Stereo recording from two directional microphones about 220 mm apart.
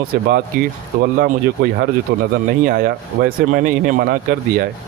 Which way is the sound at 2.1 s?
45° right (ahead or behind).